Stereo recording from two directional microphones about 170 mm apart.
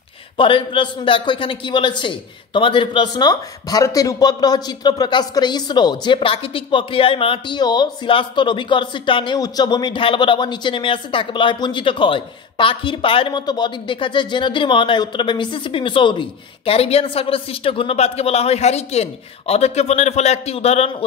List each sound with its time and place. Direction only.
0.4 s a man's voice: 30° left (ahead or behind)